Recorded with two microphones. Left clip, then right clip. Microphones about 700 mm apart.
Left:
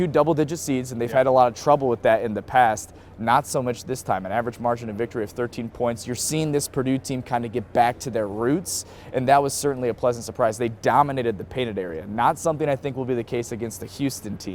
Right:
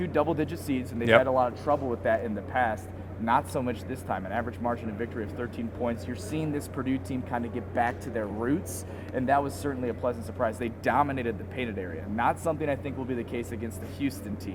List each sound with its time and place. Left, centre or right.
0.0 s a man's voice: left